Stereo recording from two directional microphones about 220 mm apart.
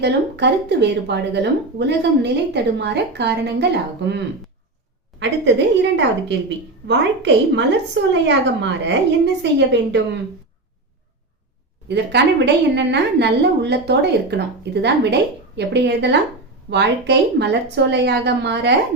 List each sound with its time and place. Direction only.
0.0 s a woman's voice: 50° right (ahead or behind)
5.2 s a woman's voice: 55° right (ahead or behind)
11.9 s a woman's voice: 50° right (ahead or behind)